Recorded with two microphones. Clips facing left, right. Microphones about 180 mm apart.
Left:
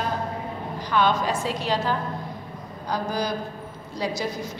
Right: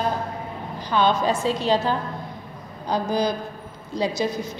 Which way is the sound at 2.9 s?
25° right (ahead or behind).